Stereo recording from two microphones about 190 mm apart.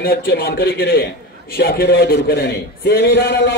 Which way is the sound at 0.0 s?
50° left (ahead or behind).